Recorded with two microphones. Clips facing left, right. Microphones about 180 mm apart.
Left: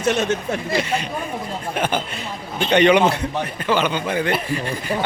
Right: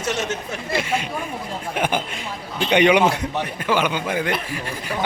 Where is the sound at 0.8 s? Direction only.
10° right (ahead or behind).